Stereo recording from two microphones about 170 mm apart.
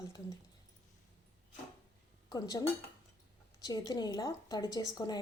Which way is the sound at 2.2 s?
25° left (ahead or behind).